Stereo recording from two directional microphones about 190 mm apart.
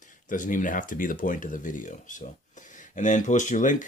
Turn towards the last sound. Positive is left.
turn(degrees=40)  # may be behind; listen again after turning